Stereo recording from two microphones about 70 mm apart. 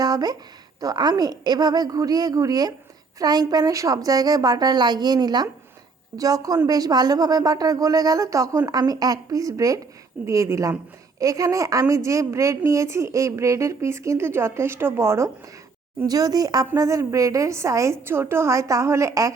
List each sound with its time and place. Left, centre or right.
0.0 s a sound: right
0.8 s a woman's voice: right
6.1 s a woman's voice: right
16.0 s a woman's voice: right